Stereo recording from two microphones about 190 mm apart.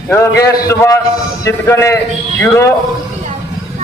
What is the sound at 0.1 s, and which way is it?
A man's voice, 15° left (ahead or behind).